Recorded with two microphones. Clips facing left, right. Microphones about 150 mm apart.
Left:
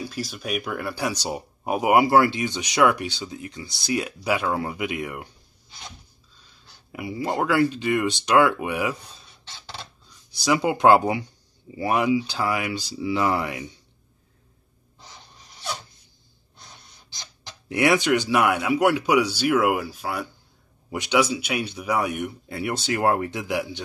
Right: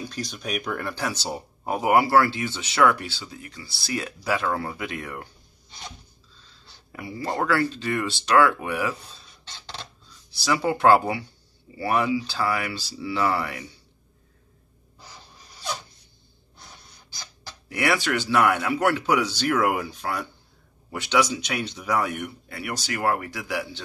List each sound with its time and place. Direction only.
0.0 s speech: 5° left (ahead or behind)
6.4 s speech: 10° left (ahead or behind)
10.3 s speech: 15° left (ahead or behind)
17.6 s speech: 20° left (ahead or behind)